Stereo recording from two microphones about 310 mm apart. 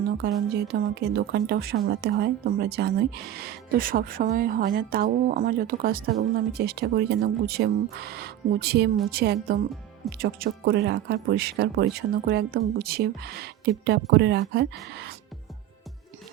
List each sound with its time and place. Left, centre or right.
0.2 s speech: right